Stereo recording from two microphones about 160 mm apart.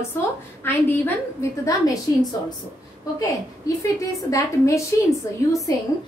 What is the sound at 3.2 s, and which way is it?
A woman's voice, 20° left (ahead or behind).